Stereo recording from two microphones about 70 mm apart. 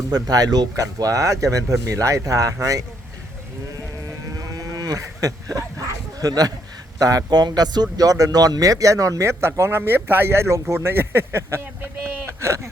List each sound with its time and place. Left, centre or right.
0.1 s speech: right
4.4 s livestock: right
6.1 s speech: right
9.4 s speech: right
12.2 s a sound: right